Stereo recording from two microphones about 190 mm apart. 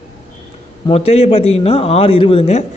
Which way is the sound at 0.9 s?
30° left (ahead or behind).